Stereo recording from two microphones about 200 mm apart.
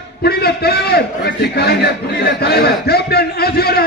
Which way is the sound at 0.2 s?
50° left (ahead or behind).